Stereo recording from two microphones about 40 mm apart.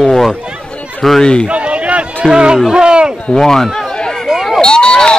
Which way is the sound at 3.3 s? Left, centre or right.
Centre.